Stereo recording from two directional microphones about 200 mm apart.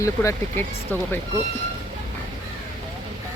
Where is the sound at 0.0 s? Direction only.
15° left (ahead or behind).